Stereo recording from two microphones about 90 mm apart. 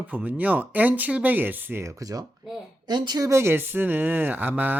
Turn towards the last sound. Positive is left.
turn(degrees=-20)  # may be behind; listen again after turning